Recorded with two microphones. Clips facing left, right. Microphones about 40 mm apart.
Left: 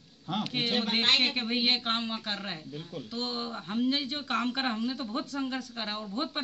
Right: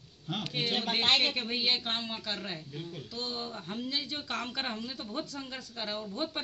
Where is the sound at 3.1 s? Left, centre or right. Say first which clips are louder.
Left 4 dB; left.